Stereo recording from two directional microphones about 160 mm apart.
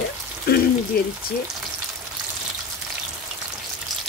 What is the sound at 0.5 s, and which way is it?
Speech, 75° left (ahead or behind).